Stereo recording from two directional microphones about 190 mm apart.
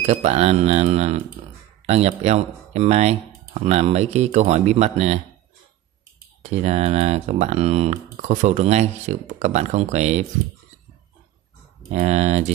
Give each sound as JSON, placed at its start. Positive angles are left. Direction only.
{"t": 0.0, "sound": "speech", "side_deg": -35}
{"t": 6.4, "sound": "speech", "side_deg": -35}
{"t": 11.9, "sound": "speech", "side_deg": -35}